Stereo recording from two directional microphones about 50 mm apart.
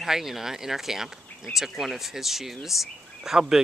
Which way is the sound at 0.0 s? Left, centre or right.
Centre.